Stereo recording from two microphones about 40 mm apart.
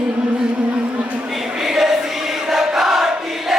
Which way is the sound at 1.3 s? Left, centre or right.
Centre.